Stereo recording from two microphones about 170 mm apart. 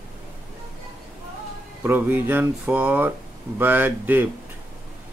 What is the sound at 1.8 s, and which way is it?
Speech, 10° right (ahead or behind).